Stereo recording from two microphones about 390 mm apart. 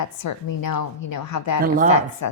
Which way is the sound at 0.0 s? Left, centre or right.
Left.